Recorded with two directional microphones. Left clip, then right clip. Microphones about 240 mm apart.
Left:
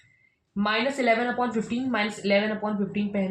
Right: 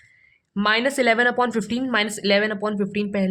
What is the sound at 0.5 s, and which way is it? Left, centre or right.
Speech, right.